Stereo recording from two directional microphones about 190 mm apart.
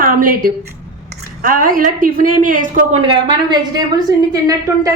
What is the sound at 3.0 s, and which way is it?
A woman's voice, 25° right (ahead or behind).